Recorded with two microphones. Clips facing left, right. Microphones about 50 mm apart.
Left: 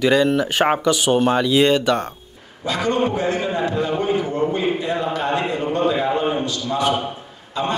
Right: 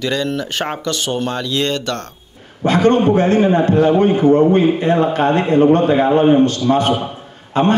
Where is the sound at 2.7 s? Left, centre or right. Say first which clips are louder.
Right 7 dB; right.